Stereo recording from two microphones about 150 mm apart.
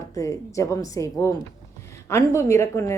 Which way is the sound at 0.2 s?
20° left (ahead or behind).